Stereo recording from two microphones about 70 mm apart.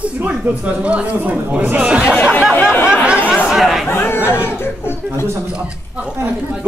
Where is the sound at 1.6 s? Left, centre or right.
Centre.